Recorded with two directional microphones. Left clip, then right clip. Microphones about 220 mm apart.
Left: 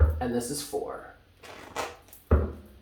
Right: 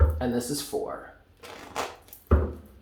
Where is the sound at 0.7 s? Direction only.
30° right (ahead or behind).